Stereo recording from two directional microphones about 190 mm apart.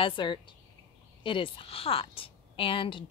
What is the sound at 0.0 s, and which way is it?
A woman's voice, 25° left (ahead or behind).